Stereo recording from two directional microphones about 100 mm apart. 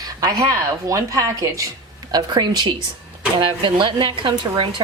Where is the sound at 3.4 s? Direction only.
60° right (ahead or behind).